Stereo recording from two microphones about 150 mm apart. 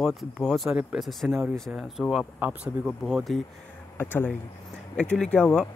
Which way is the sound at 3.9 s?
15° left (ahead or behind).